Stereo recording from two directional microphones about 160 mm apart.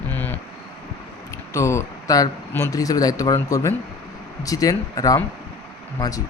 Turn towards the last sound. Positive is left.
turn(degrees=20)  # may be behind; listen again after turning